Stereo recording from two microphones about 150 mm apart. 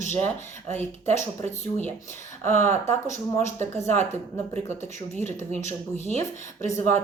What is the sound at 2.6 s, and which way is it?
A woman's voice, 15° left (ahead or behind).